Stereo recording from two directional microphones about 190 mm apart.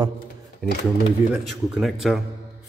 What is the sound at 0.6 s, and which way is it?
Speech, centre (ahead or behind).